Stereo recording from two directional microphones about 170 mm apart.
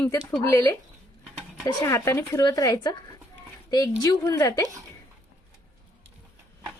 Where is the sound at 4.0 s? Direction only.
20° left (ahead or behind).